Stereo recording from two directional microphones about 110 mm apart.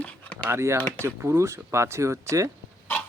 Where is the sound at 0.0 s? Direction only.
10° left (ahead or behind).